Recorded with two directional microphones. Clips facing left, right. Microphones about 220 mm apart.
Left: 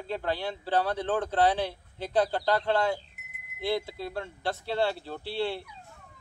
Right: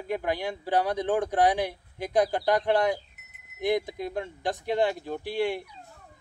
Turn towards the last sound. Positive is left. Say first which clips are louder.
# right 3 dB
turn(degrees=-15)  # may be behind; listen again after turning